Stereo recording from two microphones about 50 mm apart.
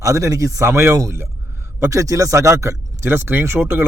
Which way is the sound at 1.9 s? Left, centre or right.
Right.